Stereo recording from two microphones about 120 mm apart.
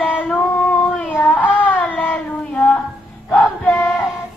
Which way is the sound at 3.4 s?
5° left (ahead or behind).